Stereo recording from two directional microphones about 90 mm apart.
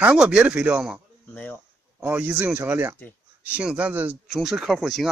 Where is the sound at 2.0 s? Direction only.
20° right (ahead or behind).